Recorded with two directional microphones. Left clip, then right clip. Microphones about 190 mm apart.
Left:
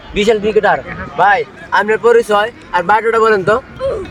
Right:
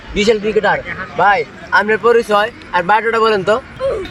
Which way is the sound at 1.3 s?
15° left (ahead or behind).